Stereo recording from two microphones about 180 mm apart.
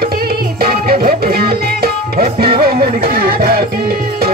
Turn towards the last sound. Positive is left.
turn(degrees=-60)  # may be behind; listen again after turning